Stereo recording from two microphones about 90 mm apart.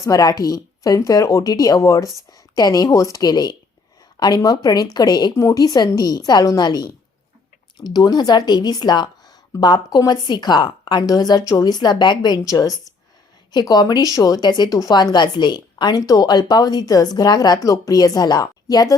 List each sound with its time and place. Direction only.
0.0 s speech: 40° left (ahead or behind)
5.3 s speech: 35° left (ahead or behind); by 12.4 s 55° left (ahead or behind)
12.4 s speech: 40° left (ahead or behind)